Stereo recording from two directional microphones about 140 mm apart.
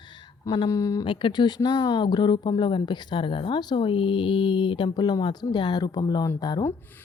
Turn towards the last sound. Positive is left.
turn(degrees=30)  # may be behind; listen again after turning